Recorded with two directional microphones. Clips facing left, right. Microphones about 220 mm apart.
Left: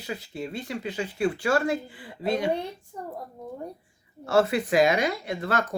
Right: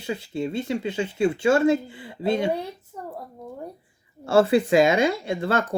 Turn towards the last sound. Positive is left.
turn(degrees=-25)  # may be behind; listen again after turning